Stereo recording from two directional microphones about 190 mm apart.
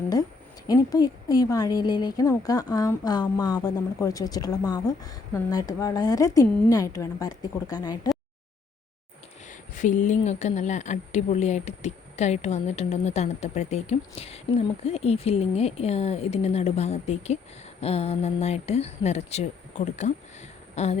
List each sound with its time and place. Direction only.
0.7 s a woman's voice: 20° left (ahead or behind)
9.5 s speech: 40° left (ahead or behind)